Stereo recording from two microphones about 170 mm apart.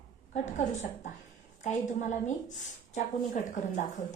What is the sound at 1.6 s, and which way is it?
A woman's voice, 45° left (ahead or behind).